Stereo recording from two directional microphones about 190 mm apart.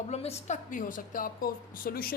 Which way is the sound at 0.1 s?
35° left (ahead or behind).